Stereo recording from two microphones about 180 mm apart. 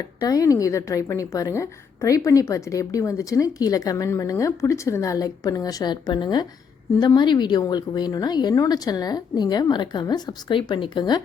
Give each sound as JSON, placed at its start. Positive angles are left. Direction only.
{"t": 0.2, "sound": "a woman's voice", "side_deg": 20}